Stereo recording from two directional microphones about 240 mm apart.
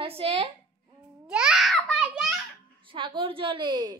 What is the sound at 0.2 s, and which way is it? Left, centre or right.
Speech, right.